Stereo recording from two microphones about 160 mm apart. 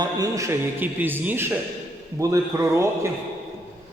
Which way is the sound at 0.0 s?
20° right (ahead or behind).